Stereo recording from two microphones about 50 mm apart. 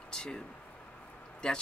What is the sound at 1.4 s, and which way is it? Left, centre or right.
Speech, centre.